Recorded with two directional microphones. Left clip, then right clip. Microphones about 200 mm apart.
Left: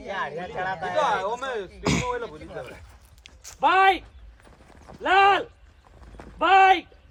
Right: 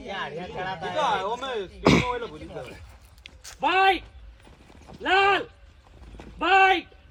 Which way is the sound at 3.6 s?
15° left (ahead or behind).